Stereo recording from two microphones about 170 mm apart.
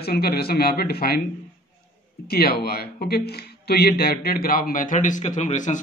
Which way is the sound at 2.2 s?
65° left (ahead or behind).